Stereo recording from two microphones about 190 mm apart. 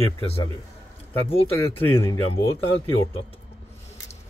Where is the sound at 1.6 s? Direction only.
10° left (ahead or behind).